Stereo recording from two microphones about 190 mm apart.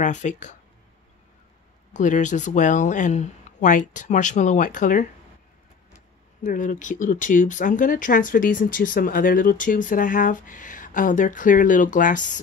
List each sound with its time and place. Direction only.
0.0 s speech: 40° left (ahead or behind)
2.0 s speech: 40° left (ahead or behind)
6.4 s speech: 45° left (ahead or behind)